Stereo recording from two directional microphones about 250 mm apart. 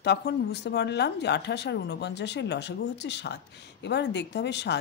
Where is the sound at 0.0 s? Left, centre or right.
Left.